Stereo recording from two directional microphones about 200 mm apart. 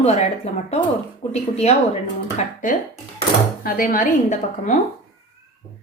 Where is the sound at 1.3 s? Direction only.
35° left (ahead or behind).